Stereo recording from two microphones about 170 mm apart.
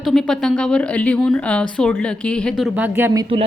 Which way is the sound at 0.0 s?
5° left (ahead or behind).